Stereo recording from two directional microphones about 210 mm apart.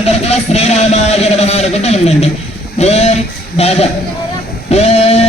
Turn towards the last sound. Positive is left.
turn(degrees=30)  # may be behind; listen again after turning